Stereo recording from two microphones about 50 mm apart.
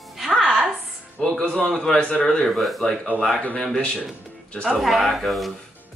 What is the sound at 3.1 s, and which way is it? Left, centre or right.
Speech, right.